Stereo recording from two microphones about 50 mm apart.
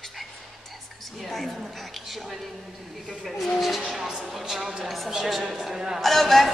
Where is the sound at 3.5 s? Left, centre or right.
Centre.